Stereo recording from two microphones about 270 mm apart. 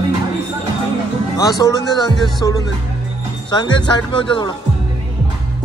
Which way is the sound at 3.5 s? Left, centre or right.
Centre.